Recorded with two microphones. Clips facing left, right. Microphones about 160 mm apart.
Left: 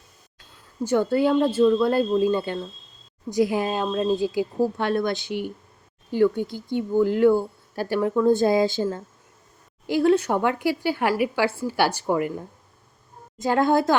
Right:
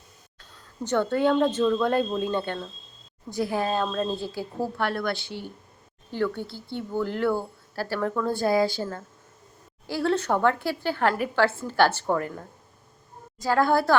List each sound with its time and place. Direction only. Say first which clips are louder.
0.9 s speech: left 2 dB; 10° left (ahead or behind)
13.4 s a woman's voice: left 2 dB; 20° left (ahead or behind)